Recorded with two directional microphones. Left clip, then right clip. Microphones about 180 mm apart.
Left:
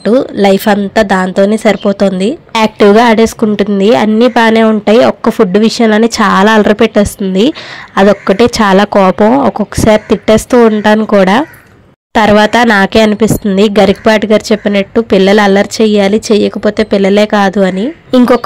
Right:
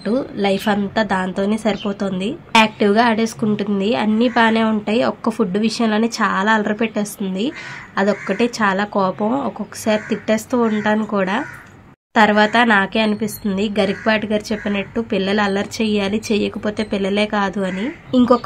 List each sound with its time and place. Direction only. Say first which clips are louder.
0.0 s speech: left 12 dB; 40° left (ahead or behind)